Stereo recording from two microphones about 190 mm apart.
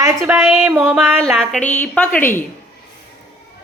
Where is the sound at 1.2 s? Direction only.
5° left (ahead or behind).